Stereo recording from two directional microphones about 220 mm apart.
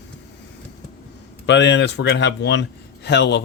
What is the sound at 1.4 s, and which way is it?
Speech, 55° left (ahead or behind).